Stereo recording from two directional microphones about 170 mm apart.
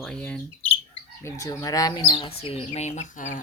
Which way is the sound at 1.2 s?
20° left (ahead or behind).